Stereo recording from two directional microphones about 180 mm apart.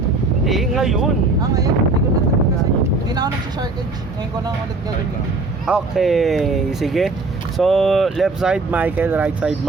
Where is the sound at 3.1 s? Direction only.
20° right (ahead or behind).